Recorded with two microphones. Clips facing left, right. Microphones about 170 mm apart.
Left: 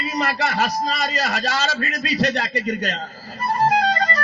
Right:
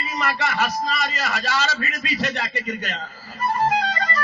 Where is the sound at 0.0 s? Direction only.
35° left (ahead or behind).